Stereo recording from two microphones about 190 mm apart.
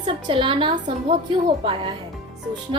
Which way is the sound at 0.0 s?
25° right (ahead or behind).